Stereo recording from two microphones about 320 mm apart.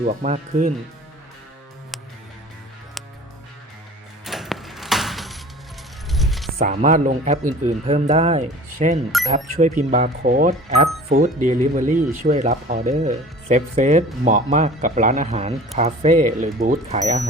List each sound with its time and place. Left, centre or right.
0.0 s speech: right
4.3 s a sound: centre
6.1 s coin: centre
6.6 s speech: right